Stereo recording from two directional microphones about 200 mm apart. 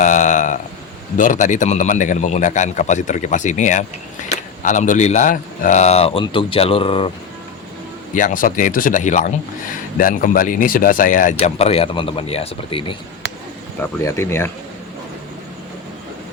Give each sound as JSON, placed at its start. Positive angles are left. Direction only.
{"t": 0.0, "sound": "a sound", "side_deg": 40}
{"t": 1.1, "sound": "speech", "side_deg": 40}
{"t": 8.1, "sound": "speech", "side_deg": 40}
{"t": 14.0, "sound": "speech", "side_deg": 15}